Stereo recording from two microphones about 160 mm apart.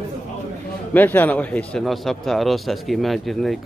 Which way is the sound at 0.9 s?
10° left (ahead or behind).